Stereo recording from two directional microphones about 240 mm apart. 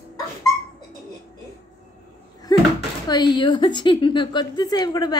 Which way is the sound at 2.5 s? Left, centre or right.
Centre.